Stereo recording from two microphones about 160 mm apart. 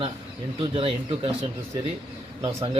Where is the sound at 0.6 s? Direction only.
35° right (ahead or behind).